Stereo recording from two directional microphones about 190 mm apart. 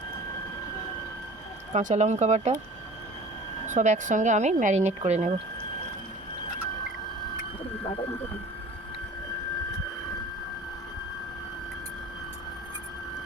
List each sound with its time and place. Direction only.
1.7 s speech: 40° right (ahead or behind)
3.7 s speech: 40° right (ahead or behind)